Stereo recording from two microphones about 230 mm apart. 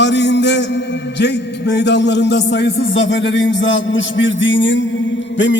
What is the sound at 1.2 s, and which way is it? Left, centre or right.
A man's voice, left.